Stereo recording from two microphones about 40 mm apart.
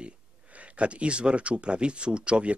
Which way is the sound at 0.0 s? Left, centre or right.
Right.